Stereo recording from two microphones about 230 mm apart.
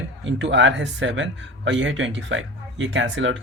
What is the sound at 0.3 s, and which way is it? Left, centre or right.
Speech, right.